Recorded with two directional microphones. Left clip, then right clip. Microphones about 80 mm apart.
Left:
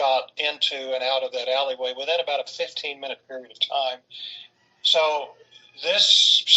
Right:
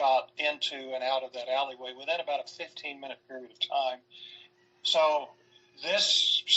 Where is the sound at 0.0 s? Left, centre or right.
Left.